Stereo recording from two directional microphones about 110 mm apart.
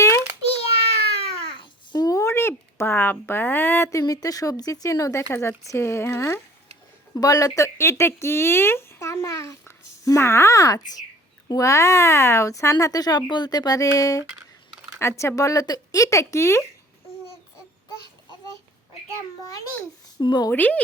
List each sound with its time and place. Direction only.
1.1 s cat: 60° left (ahead or behind)
1.9 s a sound: 35° left (ahead or behind)
4.0 s speech: 35° left (ahead or behind)
20.1 s speech: 40° left (ahead or behind)
20.5 s speech: 15° left (ahead or behind)